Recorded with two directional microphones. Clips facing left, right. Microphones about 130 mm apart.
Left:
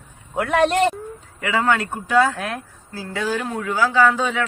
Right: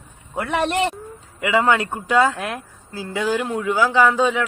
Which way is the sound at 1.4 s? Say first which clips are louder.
Right 2 dB; 15° right (ahead or behind).